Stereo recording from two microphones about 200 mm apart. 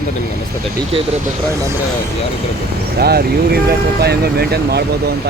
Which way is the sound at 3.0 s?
50° right (ahead or behind).